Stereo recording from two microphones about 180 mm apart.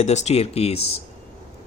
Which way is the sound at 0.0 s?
40° left (ahead or behind).